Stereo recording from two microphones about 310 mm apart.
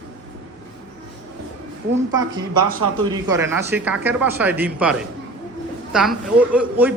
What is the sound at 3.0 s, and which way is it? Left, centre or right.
Speech, centre.